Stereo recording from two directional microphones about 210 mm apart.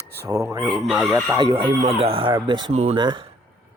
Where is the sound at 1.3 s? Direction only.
20° right (ahead or behind).